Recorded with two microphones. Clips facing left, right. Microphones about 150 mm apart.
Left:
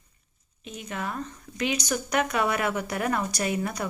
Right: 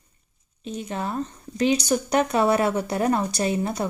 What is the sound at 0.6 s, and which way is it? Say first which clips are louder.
Speech: right 5 dB; 30° right (ahead or behind).